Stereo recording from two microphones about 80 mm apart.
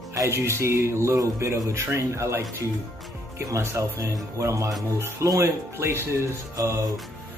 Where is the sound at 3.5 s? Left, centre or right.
Right.